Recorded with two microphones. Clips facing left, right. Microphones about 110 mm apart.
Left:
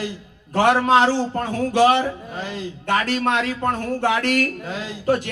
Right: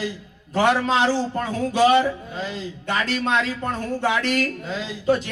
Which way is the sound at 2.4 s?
45° left (ahead or behind).